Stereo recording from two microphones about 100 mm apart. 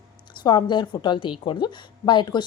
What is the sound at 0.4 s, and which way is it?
A woman's voice, 50° left (ahead or behind).